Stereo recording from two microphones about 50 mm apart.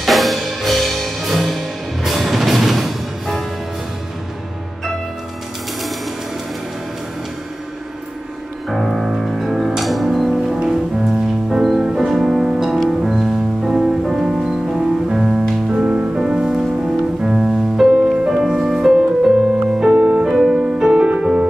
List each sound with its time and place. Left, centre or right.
0.0 s music: centre
8.6 s music: centre
15.7 s music: right
19.9 s music: right
20.2 s music: centre